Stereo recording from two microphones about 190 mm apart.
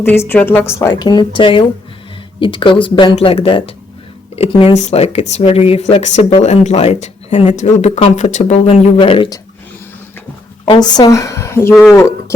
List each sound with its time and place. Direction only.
0.0 s a woman's voice: 10° left (ahead or behind); by 9.4 s 30° left (ahead or behind)
10.7 s a woman's voice: 20° left (ahead or behind)